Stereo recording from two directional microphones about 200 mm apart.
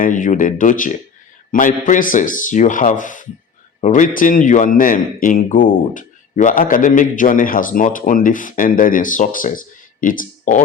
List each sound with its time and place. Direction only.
0.0 s a man's voice: 40° left (ahead or behind)